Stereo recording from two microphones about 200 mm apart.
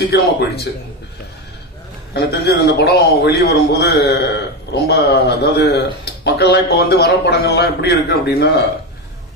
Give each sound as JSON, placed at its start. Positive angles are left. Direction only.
{"t": 0.0, "sound": "a man's voice", "side_deg": 55}
{"t": 2.1, "sound": "a man's voice", "side_deg": 55}